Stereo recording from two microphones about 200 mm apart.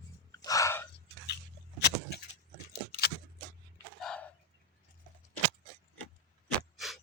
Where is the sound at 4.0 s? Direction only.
5° left (ahead or behind).